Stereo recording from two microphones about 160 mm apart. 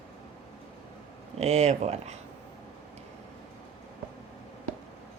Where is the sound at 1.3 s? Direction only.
45° right (ahead or behind).